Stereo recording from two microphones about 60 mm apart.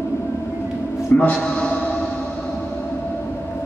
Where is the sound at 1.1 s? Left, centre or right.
Left.